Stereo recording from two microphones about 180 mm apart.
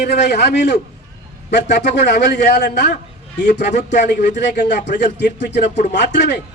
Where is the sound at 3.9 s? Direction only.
75° left (ahead or behind).